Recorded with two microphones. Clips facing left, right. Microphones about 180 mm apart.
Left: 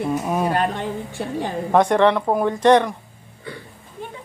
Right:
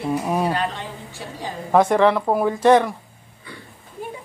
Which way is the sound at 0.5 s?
55° left (ahead or behind).